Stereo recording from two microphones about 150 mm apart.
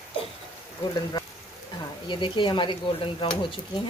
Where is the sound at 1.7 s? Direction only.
30° left (ahead or behind).